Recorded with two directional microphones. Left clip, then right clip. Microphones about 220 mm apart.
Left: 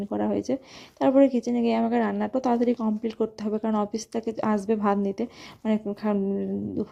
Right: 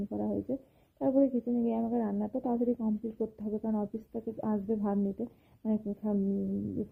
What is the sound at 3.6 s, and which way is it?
Speech, 20° left (ahead or behind).